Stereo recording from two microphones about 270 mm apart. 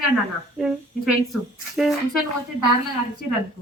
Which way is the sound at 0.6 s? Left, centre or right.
Centre.